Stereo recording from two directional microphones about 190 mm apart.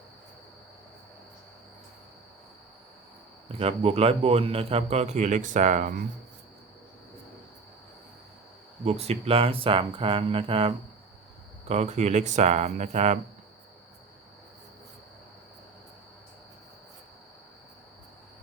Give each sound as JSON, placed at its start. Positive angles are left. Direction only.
{"t": 3.6, "sound": "a man's voice", "side_deg": -30}
{"t": 8.8, "sound": "a man's voice", "side_deg": -35}